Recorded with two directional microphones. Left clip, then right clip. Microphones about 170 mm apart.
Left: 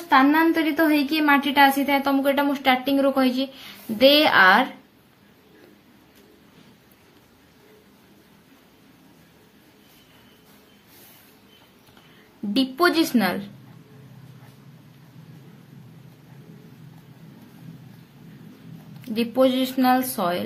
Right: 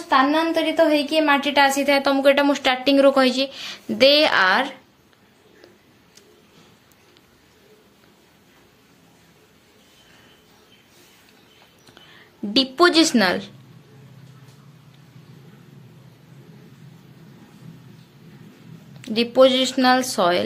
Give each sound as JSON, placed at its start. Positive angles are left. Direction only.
{"t": 0.1, "sound": "a woman's voice", "side_deg": -5}
{"t": 12.5, "sound": "a woman's voice", "side_deg": -20}
{"t": 18.9, "sound": "a woman's voice", "side_deg": -20}